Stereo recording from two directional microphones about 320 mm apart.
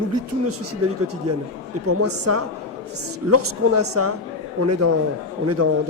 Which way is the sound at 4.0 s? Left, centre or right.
Right.